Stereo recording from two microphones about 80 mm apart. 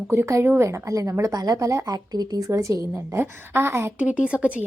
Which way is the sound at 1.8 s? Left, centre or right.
Right.